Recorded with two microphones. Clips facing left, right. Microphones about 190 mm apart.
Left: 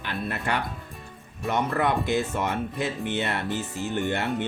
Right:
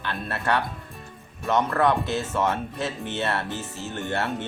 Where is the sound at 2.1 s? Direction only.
15° left (ahead or behind).